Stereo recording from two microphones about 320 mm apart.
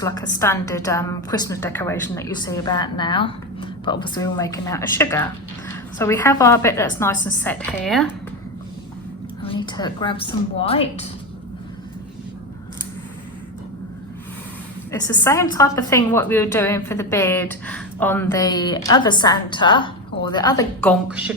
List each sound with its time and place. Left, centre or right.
0.0 s a woman's voice: centre
9.4 s a woman's voice: centre
15.0 s a woman's voice: centre